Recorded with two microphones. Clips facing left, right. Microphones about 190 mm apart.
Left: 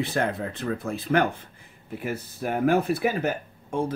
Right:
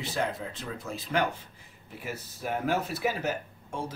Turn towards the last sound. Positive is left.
turn(degrees=55)  # may be behind; listen again after turning